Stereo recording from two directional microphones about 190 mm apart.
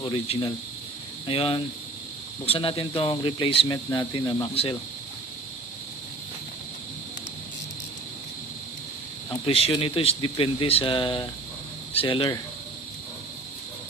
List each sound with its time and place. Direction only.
0.0 s speech: 25° left (ahead or behind)
9.3 s speech: 30° left (ahead or behind)